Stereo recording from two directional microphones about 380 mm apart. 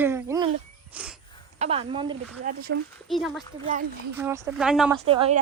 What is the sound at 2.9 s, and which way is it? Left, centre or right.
Speech, centre.